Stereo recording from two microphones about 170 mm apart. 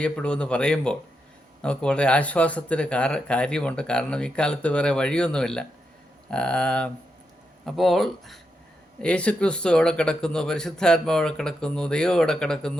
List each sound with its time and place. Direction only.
0.0 s speech: 5° left (ahead or behind)